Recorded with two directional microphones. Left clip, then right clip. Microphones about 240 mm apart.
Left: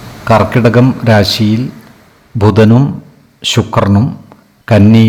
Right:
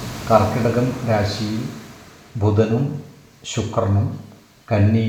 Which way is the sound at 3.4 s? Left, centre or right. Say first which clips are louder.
Left 11 dB; left.